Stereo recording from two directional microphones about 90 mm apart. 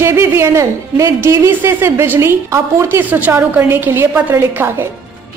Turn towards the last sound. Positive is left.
turn(degrees=-25)  # may be behind; listen again after turning